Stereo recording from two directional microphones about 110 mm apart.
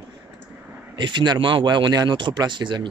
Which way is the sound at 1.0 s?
45° right (ahead or behind).